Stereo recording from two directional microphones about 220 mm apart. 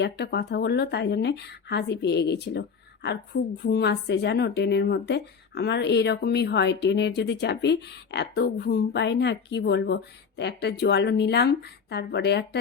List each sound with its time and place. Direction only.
0.0 s speech: 50° left (ahead or behind)